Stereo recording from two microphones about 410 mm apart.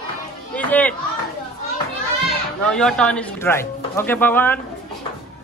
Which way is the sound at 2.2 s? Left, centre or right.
Centre.